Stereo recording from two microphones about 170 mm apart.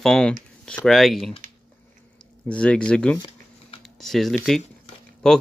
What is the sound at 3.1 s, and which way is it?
Shuffling cards, 25° left (ahead or behind).